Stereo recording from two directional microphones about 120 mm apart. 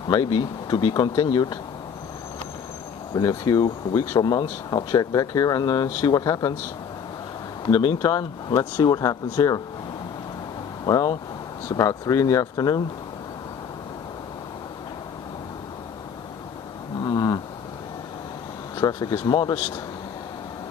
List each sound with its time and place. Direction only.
0.1 s speech: 35° left (ahead or behind)
3.2 s speech: 35° left (ahead or behind)
7.7 s speech: 35° left (ahead or behind)
10.9 s speech: 30° left (ahead or behind)
17.0 s a sound: 35° left (ahead or behind)
18.8 s speech: 35° left (ahead or behind)